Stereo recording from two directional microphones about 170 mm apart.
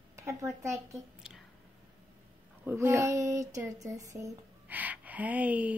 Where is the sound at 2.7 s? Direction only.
15° right (ahead or behind).